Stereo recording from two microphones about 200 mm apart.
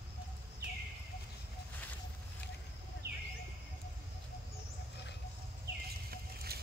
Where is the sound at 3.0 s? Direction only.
50° right (ahead or behind).